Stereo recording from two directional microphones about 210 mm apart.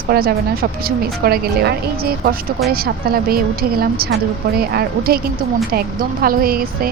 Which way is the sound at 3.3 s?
45° right (ahead or behind).